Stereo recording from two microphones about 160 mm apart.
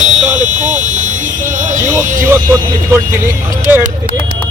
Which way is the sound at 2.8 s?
15° right (ahead or behind).